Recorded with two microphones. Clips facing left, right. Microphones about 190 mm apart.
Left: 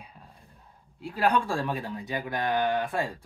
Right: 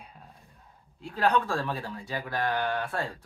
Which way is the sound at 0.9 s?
10° left (ahead or behind).